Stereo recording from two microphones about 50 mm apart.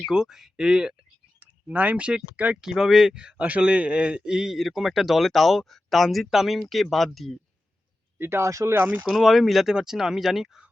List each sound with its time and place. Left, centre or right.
0.1 s speech: centre
1.6 s speech: right
2.6 s speech: centre
8.2 s speech: right
8.4 s speech: right
9.0 s speech: centre